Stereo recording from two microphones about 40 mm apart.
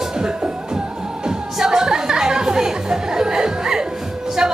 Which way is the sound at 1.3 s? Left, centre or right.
Centre.